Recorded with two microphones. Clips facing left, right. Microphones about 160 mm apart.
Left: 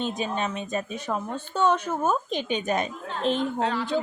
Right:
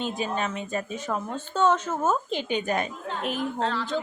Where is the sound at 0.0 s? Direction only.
20° left (ahead or behind).